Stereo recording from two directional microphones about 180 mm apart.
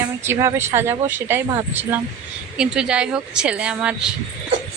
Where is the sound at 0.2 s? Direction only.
15° right (ahead or behind).